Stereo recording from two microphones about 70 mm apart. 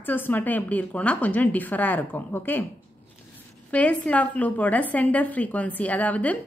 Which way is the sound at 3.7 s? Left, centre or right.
Centre.